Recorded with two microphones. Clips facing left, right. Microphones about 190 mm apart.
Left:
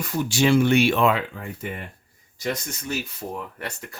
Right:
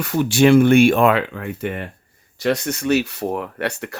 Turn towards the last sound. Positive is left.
turn(degrees=-70)  # may be behind; listen again after turning